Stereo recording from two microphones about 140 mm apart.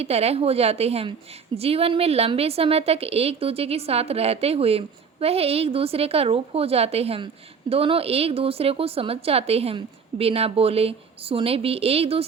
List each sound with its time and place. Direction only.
0.0 s a woman's voice: 45° right (ahead or behind)